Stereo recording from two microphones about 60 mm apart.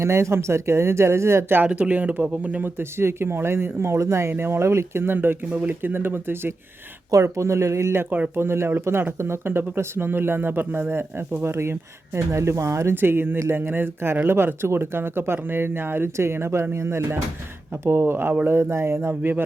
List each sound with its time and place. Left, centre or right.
0.0 s speech: right
1.5 s speech: right
7.1 s speech: right
8.4 s speech: right
12.9 s speech: right